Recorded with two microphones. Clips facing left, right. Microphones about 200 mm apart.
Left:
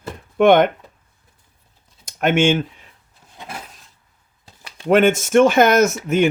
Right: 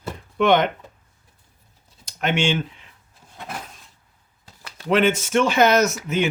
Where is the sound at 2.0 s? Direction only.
50° left (ahead or behind).